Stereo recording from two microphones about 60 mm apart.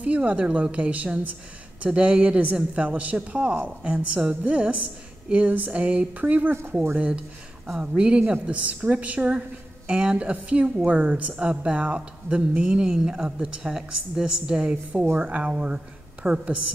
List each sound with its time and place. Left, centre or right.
0.0 s a woman's voice: right